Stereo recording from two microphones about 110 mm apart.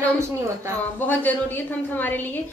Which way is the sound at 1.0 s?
15° left (ahead or behind).